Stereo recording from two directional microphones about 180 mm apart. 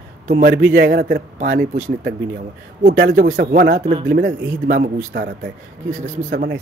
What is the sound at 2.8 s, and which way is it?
A man's voice, 60° right (ahead or behind).